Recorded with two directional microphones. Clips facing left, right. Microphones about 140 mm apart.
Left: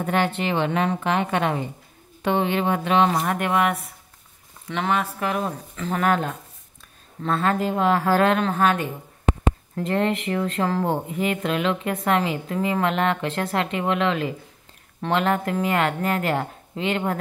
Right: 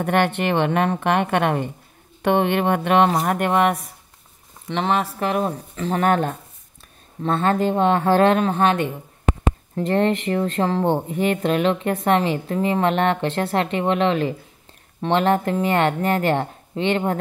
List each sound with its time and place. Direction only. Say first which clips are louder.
0.0 s a woman's voice: right 3 dB; 60° right (ahead or behind)
3.1 s speech: right 3 dB; 40° right (ahead or behind)
7.2 s speech: right 3 dB; 30° right (ahead or behind)